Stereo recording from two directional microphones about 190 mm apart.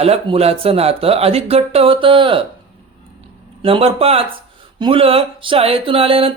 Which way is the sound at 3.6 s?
30° right (ahead or behind).